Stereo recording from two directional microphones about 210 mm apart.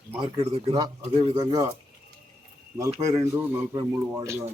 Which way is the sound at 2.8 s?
15° right (ahead or behind).